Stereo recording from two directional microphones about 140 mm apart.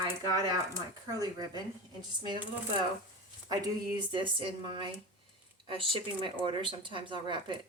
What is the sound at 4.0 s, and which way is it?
Speech, 35° right (ahead or behind).